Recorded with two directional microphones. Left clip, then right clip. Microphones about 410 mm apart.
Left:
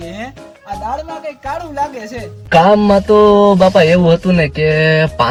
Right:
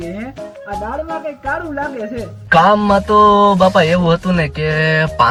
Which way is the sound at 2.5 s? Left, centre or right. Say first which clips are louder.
Left 1 dB; centre.